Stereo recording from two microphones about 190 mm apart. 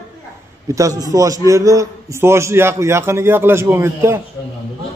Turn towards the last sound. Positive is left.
turn(degrees=-15)  # may be behind; listen again after turning